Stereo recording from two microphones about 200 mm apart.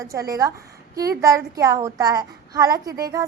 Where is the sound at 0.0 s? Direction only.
15° right (ahead or behind).